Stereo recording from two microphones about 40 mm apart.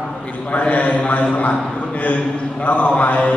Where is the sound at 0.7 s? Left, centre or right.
Left.